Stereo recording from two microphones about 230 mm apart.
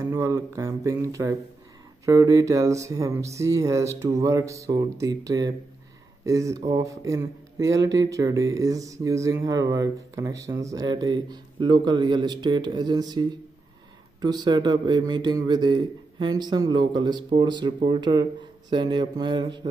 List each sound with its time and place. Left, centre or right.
0.0 s a man's voice: centre